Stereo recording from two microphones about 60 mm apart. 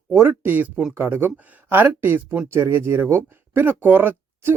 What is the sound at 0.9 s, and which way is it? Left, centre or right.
Speech, right.